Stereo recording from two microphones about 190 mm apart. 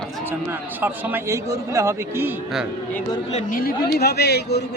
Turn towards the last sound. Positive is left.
turn(degrees=60)  # may be behind; listen again after turning